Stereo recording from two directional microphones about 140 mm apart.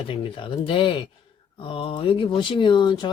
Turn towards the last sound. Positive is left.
turn(degrees=35)  # may be behind; listen again after turning